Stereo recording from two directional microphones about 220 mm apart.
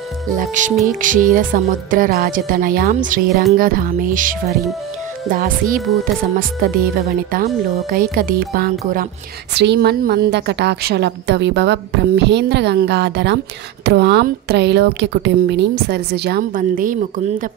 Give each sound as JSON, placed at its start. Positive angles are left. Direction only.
{"t": 0.4, "sound": "a woman's voice", "side_deg": -35}